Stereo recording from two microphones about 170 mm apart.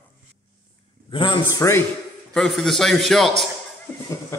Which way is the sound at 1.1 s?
30° left (ahead or behind).